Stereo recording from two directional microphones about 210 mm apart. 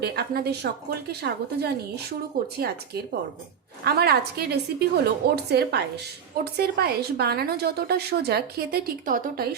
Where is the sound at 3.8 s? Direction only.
50° right (ahead or behind).